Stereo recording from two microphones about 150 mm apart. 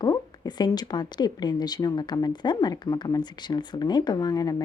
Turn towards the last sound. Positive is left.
turn(degrees=25)  # may be behind; listen again after turning